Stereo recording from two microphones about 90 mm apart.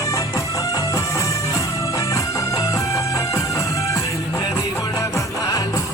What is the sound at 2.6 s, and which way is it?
Music, 35° left (ahead or behind).